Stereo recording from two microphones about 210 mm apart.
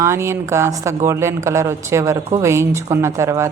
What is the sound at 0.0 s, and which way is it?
A woman's voice, 15° right (ahead or behind).